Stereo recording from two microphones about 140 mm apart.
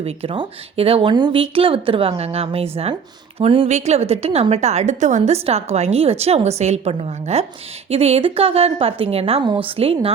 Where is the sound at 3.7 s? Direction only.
55° right (ahead or behind).